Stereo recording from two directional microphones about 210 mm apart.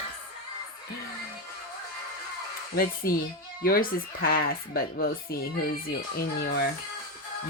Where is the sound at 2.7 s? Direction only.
45° left (ahead or behind).